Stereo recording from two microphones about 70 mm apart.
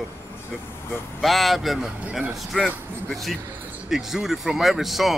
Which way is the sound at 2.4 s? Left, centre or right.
Centre.